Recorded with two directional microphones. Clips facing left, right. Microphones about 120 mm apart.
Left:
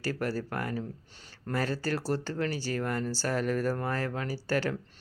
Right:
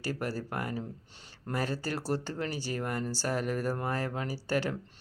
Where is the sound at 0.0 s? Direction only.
15° right (ahead or behind).